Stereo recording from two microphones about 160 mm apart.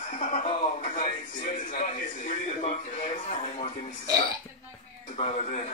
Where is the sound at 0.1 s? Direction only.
50° left (ahead or behind).